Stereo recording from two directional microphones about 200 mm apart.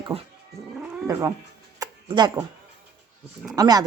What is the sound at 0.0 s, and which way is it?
Speech, 30° right (ahead or behind).